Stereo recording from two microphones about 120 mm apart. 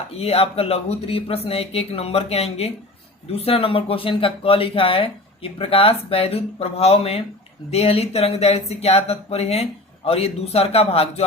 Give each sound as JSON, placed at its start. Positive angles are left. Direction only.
{"t": 0.1, "sound": "speech", "side_deg": 55}